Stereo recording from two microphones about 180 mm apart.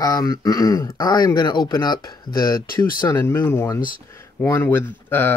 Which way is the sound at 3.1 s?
15° left (ahead or behind).